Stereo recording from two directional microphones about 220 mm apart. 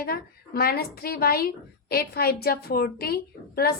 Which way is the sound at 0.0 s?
45° left (ahead or behind).